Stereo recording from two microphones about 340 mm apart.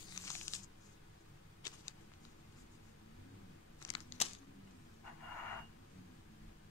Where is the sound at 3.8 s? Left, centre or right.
Centre.